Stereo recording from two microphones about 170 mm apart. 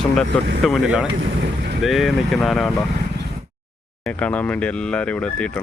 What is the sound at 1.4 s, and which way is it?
Boat, 80° right.